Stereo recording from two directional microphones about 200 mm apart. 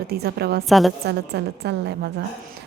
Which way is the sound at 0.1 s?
55° right (ahead or behind).